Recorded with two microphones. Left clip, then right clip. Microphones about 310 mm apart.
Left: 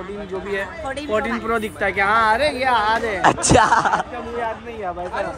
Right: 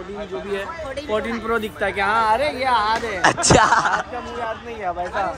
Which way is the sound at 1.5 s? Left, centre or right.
Centre.